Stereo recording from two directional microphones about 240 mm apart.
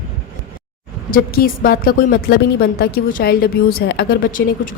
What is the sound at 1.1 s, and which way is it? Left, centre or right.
A woman's voice, left.